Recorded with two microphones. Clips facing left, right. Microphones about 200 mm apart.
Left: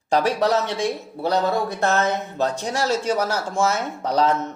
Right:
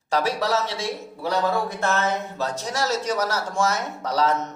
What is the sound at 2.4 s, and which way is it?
Speech, 35° left (ahead or behind).